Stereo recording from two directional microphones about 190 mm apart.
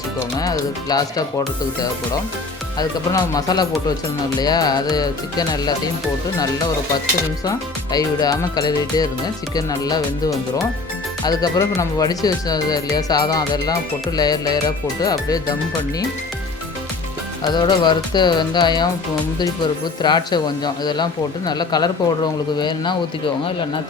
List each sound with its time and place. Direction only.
0.3 s speech: 20° left (ahead or behind)
2.7 s speech: 20° left (ahead or behind)
7.9 s speech: 20° left (ahead or behind)
17.5 s speech: 25° left (ahead or behind)
20.0 s speech: 25° left (ahead or behind)